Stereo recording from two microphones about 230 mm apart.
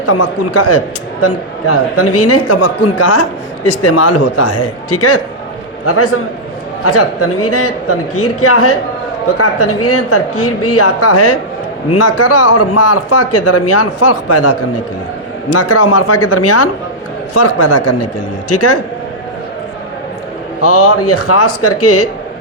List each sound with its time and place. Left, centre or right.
0.0 s a man's voice: left
1.2 s speech: left
5.8 s a man's voice: left
15.5 s a man's voice: left
18.4 s speech: left
20.6 s a man's voice: left